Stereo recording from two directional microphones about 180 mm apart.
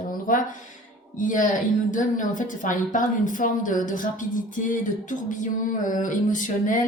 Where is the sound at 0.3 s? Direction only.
50° left (ahead or behind).